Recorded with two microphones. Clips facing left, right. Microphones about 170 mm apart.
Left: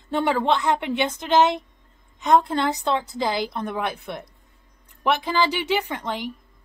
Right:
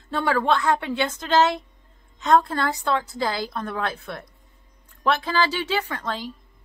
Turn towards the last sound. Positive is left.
turn(degrees=15)  # may be behind; listen again after turning